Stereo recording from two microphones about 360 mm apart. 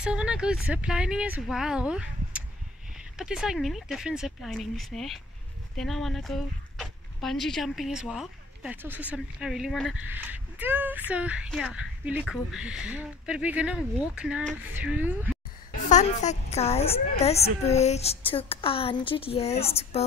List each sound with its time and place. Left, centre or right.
0.0 s speech: centre
15.9 s a woman's voice: centre